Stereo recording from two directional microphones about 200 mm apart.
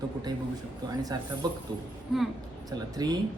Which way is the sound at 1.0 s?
20° right (ahead or behind).